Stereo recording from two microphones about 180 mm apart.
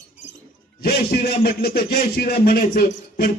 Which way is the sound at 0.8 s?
60° left (ahead or behind).